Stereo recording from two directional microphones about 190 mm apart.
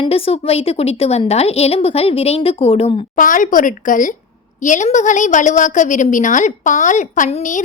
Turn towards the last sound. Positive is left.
turn(degrees=40)  # may be behind; listen again after turning